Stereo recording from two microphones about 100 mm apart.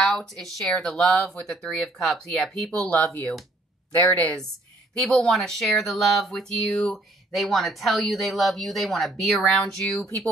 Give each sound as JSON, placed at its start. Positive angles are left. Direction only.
{"t": 0.0, "sound": "speech", "side_deg": 5}
{"t": 3.9, "sound": "speech", "side_deg": 20}
{"t": 5.0, "sound": "speech", "side_deg": 5}